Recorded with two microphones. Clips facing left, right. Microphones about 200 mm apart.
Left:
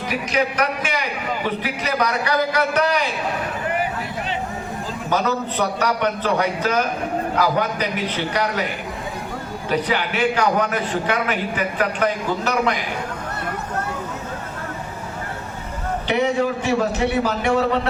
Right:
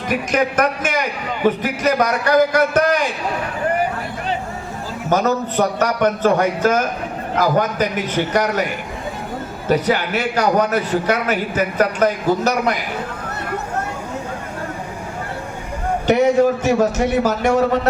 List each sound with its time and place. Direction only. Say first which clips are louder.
0.1 s a man's voice: right 4 dB; 50° right (ahead or behind)
5.0 s a man's voice: right 4 dB; 45° right (ahead or behind)
9.6 s a man's voice: right 5 dB; 40° right (ahead or behind)
16.0 s a man's voice: right 6 dB; 45° right (ahead or behind)